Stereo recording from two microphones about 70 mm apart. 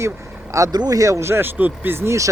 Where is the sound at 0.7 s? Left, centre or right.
Right.